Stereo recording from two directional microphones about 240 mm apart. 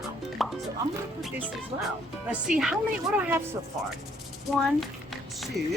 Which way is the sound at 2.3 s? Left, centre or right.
Centre.